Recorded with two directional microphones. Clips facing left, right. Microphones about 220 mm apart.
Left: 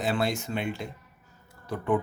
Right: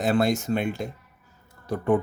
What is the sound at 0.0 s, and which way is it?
Speech, 45° right (ahead or behind).